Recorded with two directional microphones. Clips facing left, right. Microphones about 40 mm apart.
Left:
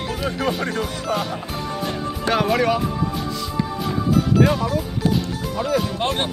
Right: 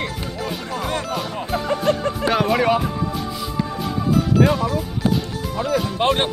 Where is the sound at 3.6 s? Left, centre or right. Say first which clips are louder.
Even; centre.